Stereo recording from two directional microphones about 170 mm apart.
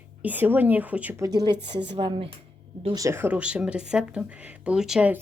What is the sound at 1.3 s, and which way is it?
A woman's voice, 25° right (ahead or behind).